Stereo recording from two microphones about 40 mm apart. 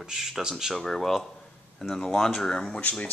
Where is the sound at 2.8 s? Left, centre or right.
Left.